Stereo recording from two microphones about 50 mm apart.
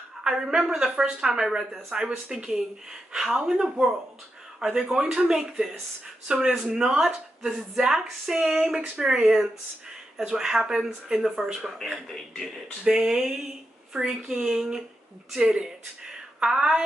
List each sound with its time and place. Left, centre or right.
0.3 s a woman's voice: centre
2.0 s a woman's voice: centre
12.8 s a woman's voice: centre